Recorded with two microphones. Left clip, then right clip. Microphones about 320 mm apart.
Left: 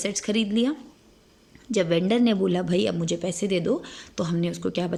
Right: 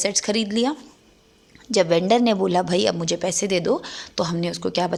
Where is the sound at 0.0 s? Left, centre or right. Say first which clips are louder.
Right 4 dB; centre.